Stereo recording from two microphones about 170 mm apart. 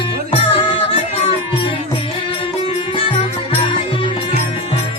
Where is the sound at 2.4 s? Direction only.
30° left (ahead or behind).